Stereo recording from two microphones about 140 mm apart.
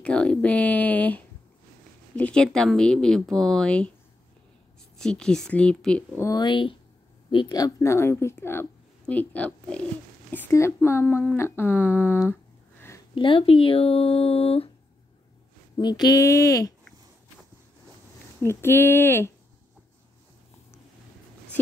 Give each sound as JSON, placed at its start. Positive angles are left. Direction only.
{"t": 0.0, "sound": "speech", "side_deg": 10}
{"t": 4.9, "sound": "speech", "side_deg": 5}
{"t": 6.2, "sound": "a woman's voice", "side_deg": 30}
{"t": 13.1, "sound": "speech", "side_deg": 40}
{"t": 15.8, "sound": "a woman's voice", "side_deg": 30}
{"t": 18.4, "sound": "speech", "side_deg": 15}